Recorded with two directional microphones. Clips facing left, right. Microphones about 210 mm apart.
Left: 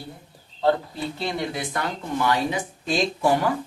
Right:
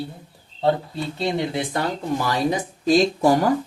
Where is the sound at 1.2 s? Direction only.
25° right (ahead or behind).